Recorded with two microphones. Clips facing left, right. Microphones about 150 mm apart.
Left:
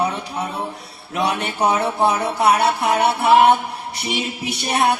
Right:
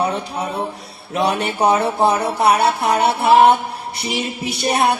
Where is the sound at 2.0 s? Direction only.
30° right (ahead or behind).